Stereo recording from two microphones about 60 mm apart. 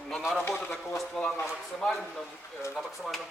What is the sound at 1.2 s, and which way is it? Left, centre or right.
A man's voice, centre.